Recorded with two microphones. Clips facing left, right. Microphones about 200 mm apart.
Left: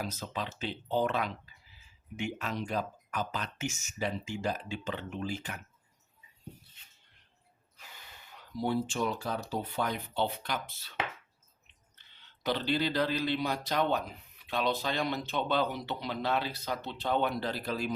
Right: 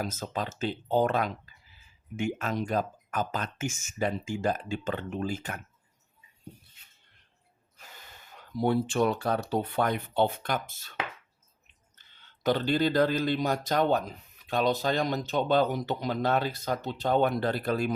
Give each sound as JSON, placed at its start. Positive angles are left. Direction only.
{"t": 0.0, "sound": "speech", "side_deg": -45}
{"t": 8.4, "sound": "speech", "side_deg": -55}
{"t": 11.9, "sound": "speech", "side_deg": -45}